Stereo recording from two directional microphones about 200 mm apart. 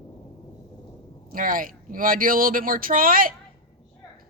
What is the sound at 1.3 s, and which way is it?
Speech, 45° right (ahead or behind).